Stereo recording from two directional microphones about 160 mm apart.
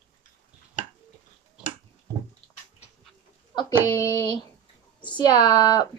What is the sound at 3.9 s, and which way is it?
Speech, 20° left (ahead or behind).